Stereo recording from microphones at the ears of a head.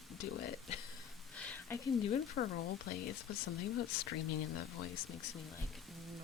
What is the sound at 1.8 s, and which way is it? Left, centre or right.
Speech, left.